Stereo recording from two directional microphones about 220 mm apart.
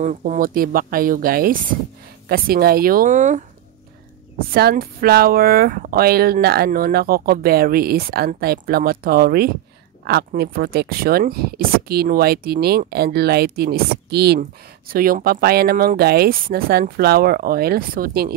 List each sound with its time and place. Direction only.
0.0 s speech: 35° right (ahead or behind)
4.5 s speech: 45° right (ahead or behind)